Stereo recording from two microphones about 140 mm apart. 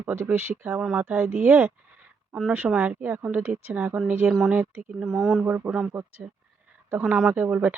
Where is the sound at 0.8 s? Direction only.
5° right (ahead or behind).